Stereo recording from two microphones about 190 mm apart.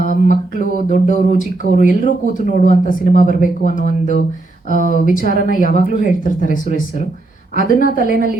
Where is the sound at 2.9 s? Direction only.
45° left (ahead or behind).